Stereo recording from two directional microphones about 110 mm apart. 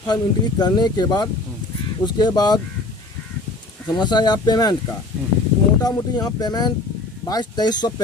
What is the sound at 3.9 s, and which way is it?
Speech, 40° left (ahead or behind).